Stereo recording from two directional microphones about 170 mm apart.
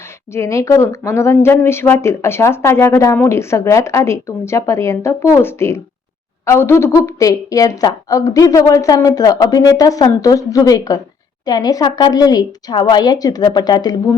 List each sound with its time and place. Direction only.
0.3 s a woman's voice: 20° left (ahead or behind)